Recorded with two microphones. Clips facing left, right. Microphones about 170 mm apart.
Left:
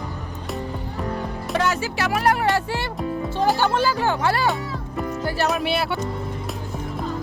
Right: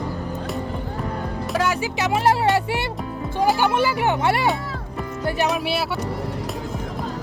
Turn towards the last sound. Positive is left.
turn(degrees=-5)  # may be behind; listen again after turning